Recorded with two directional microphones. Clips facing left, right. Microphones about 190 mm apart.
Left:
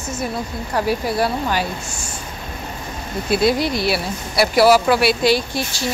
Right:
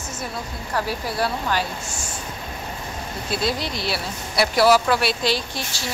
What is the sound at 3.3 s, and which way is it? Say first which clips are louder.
Speech: left 8 dB; 10° left (ahead or behind).